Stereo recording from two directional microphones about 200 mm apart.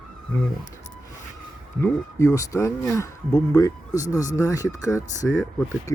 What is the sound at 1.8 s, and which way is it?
Speech, 15° left (ahead or behind).